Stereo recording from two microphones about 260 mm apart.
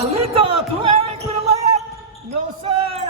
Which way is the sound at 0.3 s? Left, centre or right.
Right.